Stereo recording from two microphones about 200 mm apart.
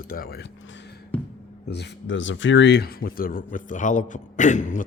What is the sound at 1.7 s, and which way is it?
Speech, 60° left (ahead or behind).